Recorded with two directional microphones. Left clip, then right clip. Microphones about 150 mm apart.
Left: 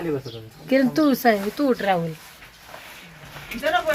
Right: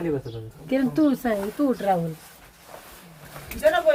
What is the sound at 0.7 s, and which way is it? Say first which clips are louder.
Speech: left 3 dB; 45° left (ahead or behind).